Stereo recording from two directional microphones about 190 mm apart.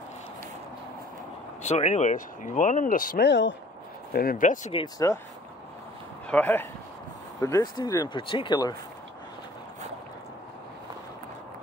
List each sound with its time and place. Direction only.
1.6 s speech: 35° left (ahead or behind); by 3.5 s 65° left (ahead or behind)
4.1 s speech: 50° left (ahead or behind)
4.7 s speech: 20° left (ahead or behind)
6.2 s speech: 10° left (ahead or behind)